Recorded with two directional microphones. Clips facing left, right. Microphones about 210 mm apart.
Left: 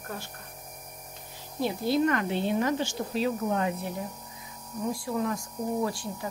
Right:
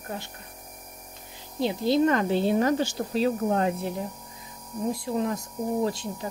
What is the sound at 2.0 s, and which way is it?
Speech, 35° right (ahead or behind).